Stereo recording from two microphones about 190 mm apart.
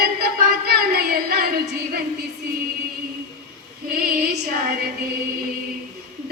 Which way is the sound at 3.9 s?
50° right (ahead or behind).